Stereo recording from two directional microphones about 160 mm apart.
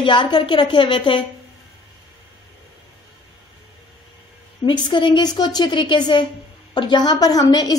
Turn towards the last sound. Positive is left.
turn(degrees=25)  # may be behind; listen again after turning